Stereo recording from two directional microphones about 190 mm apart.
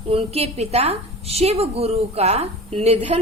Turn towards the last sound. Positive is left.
turn(degrees=-35)  # may be behind; listen again after turning